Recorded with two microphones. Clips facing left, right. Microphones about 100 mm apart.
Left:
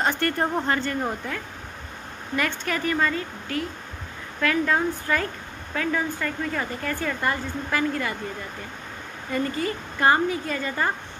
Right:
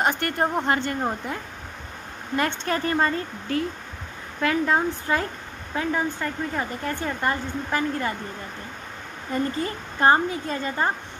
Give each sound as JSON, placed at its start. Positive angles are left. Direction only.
{"t": 0.0, "sound": "speech", "side_deg": -15}
{"t": 2.3, "sound": "speech", "side_deg": -35}
{"t": 4.4, "sound": "speech", "side_deg": -25}
{"t": 9.9, "sound": "speech", "side_deg": -30}